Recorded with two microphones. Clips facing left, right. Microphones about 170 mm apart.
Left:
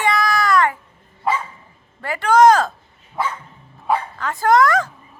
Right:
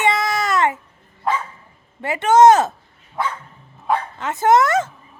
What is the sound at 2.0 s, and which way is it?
Speech, 20° right (ahead or behind).